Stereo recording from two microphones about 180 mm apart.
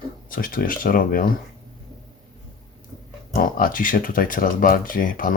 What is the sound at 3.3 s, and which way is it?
Speech, 50° left (ahead or behind).